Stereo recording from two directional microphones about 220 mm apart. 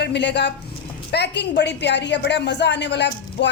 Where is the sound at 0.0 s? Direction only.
50° left (ahead or behind).